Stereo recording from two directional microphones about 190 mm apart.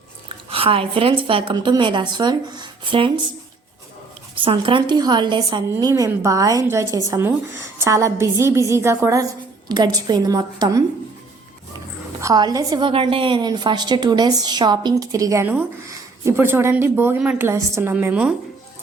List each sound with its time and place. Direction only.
0.5 s a woman's voice: 30° right (ahead or behind)
4.4 s a woman's voice: 25° right (ahead or behind)
12.2 s a woman's voice: 20° right (ahead or behind)